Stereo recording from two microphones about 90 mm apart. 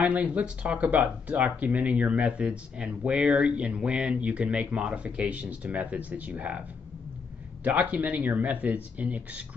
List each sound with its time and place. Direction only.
0.0 s speech: 15° right (ahead or behind)
7.6 s speech: 15° right (ahead or behind)